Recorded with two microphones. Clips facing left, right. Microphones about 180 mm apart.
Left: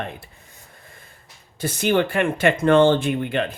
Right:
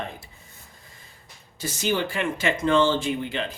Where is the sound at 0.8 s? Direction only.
55° left (ahead or behind).